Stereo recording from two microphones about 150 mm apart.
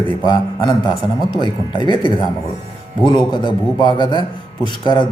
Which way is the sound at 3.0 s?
30° left (ahead or behind).